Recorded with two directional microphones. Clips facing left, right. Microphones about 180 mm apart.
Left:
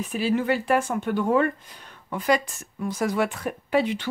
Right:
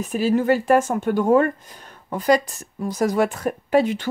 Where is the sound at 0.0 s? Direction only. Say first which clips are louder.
Right 4 dB; 45° right (ahead or behind).